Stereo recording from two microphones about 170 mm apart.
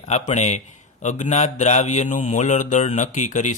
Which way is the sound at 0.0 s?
40° left (ahead or behind).